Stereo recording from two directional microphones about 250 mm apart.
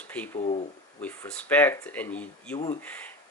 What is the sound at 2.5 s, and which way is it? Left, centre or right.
Speech, left.